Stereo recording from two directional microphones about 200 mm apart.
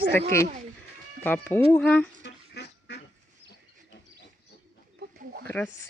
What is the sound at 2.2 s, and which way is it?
Duck, 60° left (ahead or behind).